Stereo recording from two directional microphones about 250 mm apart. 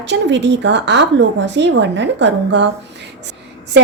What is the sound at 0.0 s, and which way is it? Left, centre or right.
Speech, right.